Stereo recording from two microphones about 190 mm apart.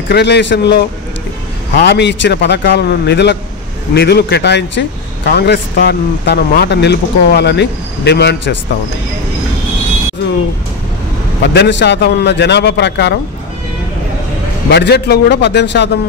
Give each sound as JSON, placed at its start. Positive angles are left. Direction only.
{"t": 0.1, "sound": "a man's voice", "side_deg": 65}
{"t": 11.4, "sound": "a man's voice", "side_deg": 60}
{"t": 14.7, "sound": "a man's voice", "side_deg": 60}